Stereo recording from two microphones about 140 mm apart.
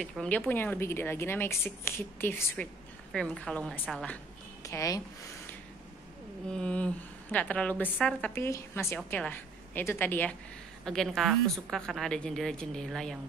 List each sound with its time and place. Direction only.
0.0 s a woman's voice: 5° left (ahead or behind)
4.6 s speech: 25° left (ahead or behind)
6.5 s a woman's voice: 10° left (ahead or behind)
10.9 s a woman's voice: 5° left (ahead or behind)